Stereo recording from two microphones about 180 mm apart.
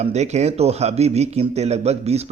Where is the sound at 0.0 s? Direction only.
40° right (ahead or behind).